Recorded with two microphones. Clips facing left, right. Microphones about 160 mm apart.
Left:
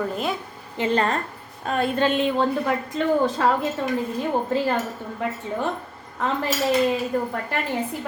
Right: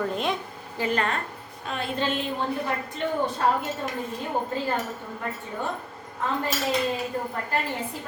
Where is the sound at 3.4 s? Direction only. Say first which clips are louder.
Right 1 dB; 90° left.